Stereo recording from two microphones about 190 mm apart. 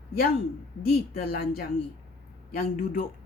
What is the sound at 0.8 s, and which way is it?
Speech, 50° left (ahead or behind).